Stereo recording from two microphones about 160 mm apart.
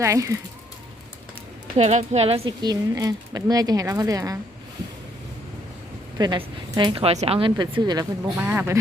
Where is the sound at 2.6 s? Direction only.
25° right (ahead or behind).